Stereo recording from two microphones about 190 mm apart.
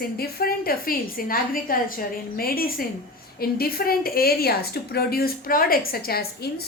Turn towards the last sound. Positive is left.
turn(degrees=55)  # may be behind; listen again after turning